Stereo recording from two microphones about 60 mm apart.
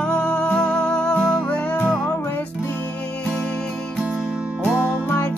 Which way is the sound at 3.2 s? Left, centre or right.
Centre.